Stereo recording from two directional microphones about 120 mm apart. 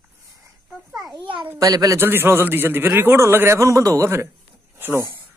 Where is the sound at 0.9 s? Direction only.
35° right (ahead or behind).